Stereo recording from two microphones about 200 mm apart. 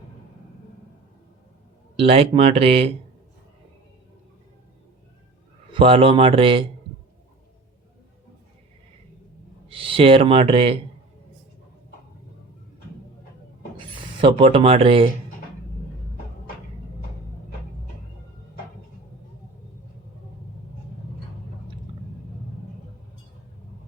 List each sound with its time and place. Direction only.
2.0 s speech: 30° right (ahead or behind)
5.8 s speech: 30° right (ahead or behind)
9.6 s speech: 25° right (ahead or behind)
13.7 s speech: 25° right (ahead or behind)